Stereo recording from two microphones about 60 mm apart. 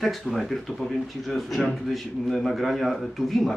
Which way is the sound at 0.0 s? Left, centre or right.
Centre.